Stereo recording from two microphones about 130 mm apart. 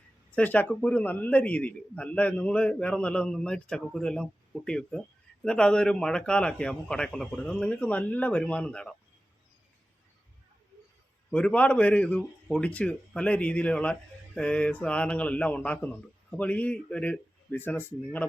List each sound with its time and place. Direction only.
0.3 s a man's voice: 10° left (ahead or behind)
11.3 s a man's voice: 10° left (ahead or behind)